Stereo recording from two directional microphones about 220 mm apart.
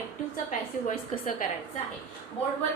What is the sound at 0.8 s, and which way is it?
Speech, 35° left (ahead or behind).